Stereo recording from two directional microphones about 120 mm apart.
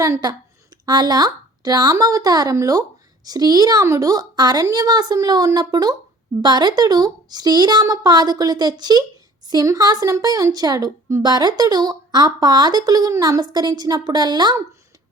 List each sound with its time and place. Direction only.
0.0 s a woman's voice: 30° right (ahead or behind)